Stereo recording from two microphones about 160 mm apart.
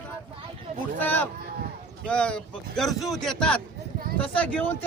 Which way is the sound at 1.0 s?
10° left (ahead or behind).